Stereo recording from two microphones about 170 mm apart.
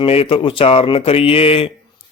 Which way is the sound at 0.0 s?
35° left (ahead or behind).